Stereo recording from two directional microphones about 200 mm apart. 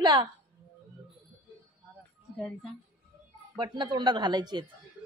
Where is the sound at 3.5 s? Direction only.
20° right (ahead or behind).